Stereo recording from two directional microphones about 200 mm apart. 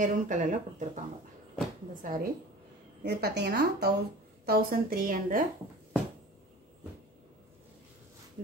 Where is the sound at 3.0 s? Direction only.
55° right (ahead or behind).